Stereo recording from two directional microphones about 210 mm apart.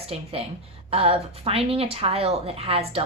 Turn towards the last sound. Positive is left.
turn(degrees=-30)  # may be behind; listen again after turning